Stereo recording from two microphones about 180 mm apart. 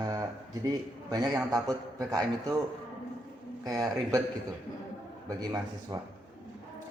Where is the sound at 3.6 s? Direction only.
Centre (ahead or behind).